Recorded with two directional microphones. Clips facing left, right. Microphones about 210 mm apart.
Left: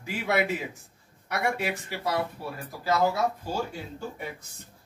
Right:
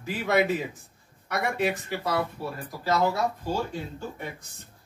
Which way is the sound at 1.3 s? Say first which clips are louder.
Right 2 dB; 10° left (ahead or behind).